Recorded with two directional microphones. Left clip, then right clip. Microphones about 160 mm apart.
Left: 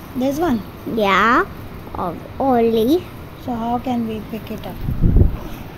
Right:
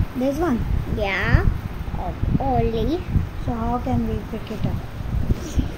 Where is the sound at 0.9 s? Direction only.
55° left (ahead or behind).